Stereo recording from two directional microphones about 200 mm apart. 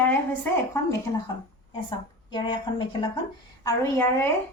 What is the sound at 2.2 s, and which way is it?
A woman's voice, 20° left (ahead or behind).